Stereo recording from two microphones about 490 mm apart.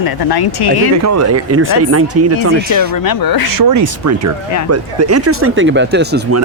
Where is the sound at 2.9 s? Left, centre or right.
Left.